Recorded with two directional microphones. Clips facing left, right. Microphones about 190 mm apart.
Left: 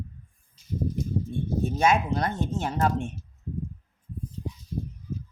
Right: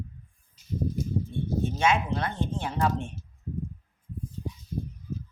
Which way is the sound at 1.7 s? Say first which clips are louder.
Left 3 dB; 40° left (ahead or behind).